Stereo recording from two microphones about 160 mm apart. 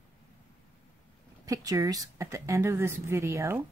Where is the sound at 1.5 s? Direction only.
20° right (ahead or behind).